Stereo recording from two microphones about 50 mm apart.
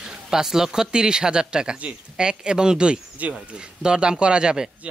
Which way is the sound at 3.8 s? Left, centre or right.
Centre.